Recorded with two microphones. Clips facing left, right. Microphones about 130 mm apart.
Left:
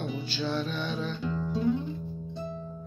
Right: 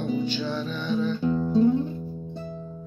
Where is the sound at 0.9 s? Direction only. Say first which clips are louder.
Right 8 dB; 10° right (ahead or behind).